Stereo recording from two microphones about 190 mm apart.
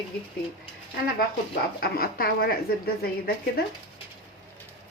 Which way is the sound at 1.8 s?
50° left (ahead or behind).